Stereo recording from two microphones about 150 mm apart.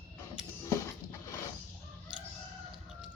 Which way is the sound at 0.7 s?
15° left (ahead or behind).